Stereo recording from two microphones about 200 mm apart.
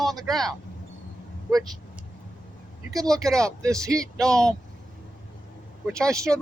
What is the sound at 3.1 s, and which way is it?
Speech, centre (ahead or behind).